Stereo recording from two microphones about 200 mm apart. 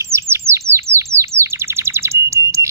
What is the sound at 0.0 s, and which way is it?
Chirp, 15° right (ahead or behind).